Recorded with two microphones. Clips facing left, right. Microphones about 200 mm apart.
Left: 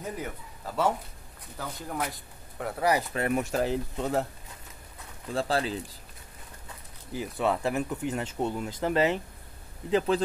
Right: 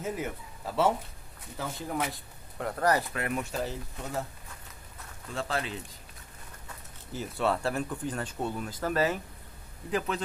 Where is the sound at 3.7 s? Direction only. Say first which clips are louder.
Left 9 dB; 65° left (ahead or behind).